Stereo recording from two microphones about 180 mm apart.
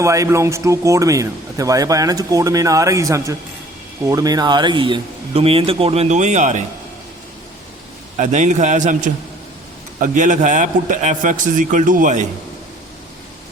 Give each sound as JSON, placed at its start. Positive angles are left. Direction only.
{"t": 0.0, "sound": "speech", "side_deg": -15}
{"t": 8.2, "sound": "speech", "side_deg": -40}
{"t": 10.0, "sound": "a man's voice", "side_deg": -45}